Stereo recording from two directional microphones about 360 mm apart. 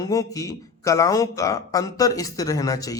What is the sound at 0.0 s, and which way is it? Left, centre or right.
A man's voice, centre.